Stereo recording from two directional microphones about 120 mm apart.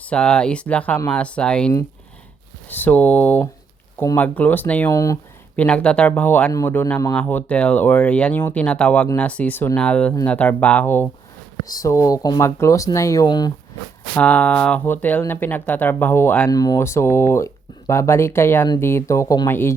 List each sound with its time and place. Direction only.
0.0 s speech: 10° left (ahead or behind)
4.9 s speech: 30° left (ahead or behind)
5.5 s speech: 10° left (ahead or behind)
11.6 s speech: 30° left (ahead or behind)
13.2 s speech: 35° left (ahead or behind)
14.2 s speech: 15° left (ahead or behind)
16.5 s speech: 30° left (ahead or behind)